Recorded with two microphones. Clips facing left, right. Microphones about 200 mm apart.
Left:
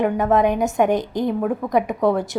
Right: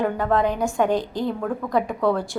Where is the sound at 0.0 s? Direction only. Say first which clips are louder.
Left 4 dB; 20° left (ahead or behind).